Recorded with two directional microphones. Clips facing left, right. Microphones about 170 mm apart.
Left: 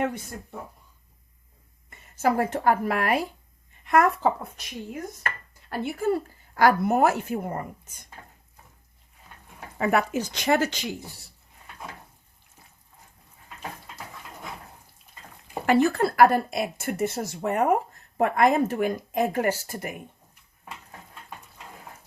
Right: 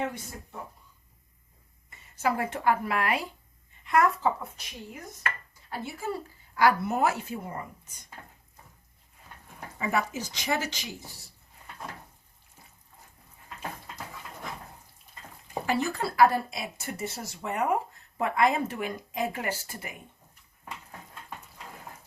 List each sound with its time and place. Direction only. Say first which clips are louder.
2.1 s a woman's voice: left 5 dB; 45° left (ahead or behind)
5.2 s speech: left 1 dB; 65° left (ahead or behind)
9.7 s speech: left 6 dB; 65° left (ahead or behind)
15.6 s a woman's voice: left 8 dB; 60° left (ahead or behind)